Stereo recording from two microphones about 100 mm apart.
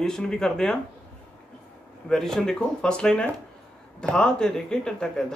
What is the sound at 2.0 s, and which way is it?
Speech, 5° left (ahead or behind).